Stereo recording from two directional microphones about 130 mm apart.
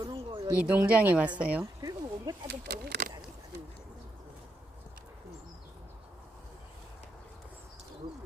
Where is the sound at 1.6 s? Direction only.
30° right (ahead or behind).